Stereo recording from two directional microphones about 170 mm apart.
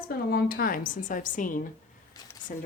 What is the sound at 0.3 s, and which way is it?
A woman's voice, 60° left (ahead or behind).